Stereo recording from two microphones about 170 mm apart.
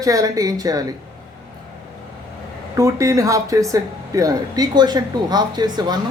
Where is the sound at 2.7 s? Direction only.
20° right (ahead or behind).